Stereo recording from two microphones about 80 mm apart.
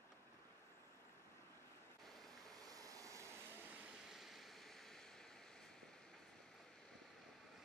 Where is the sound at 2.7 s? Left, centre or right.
Right.